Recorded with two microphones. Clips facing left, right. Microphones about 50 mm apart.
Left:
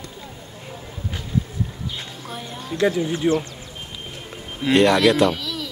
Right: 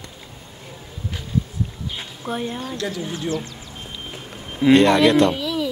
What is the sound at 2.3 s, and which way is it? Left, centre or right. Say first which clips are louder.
Speech: right 7 dB; right.